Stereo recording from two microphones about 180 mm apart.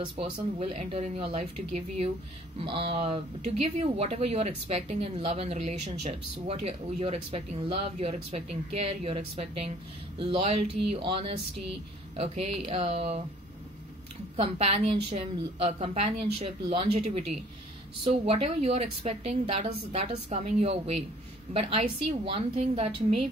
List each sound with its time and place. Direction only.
0.0 s speech: 30° right (ahead or behind)
14.3 s speech: 35° right (ahead or behind)